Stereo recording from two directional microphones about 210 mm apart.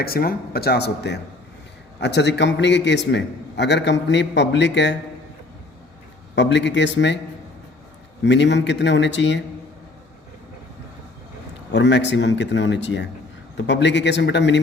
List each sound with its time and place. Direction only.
0.0 s a man's voice: 45° left (ahead or behind)
6.3 s a man's voice: 55° left (ahead or behind)
8.2 s a man's voice: 55° left (ahead or behind)
11.7 s a man's voice: 55° left (ahead or behind)